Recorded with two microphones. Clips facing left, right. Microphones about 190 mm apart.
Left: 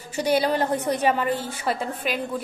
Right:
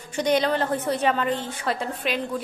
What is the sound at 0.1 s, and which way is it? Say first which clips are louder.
A woman's voice: even; 10° left (ahead or behind).